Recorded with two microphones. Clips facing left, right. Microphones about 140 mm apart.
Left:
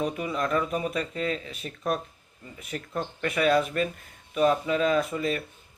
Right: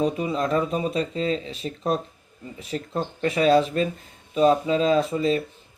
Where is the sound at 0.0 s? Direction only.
25° right (ahead or behind).